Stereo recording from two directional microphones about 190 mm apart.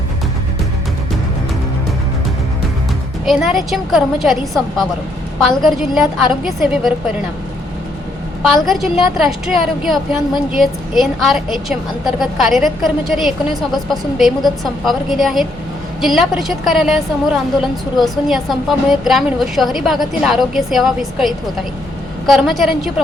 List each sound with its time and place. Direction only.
3.2 s a woman's voice: centre (ahead or behind)
8.4 s a woman's voice: centre (ahead or behind)